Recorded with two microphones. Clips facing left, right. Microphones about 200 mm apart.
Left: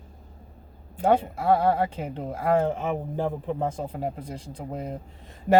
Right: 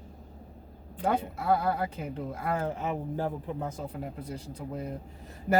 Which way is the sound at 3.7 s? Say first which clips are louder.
Left 6 dB; 30° left (ahead or behind).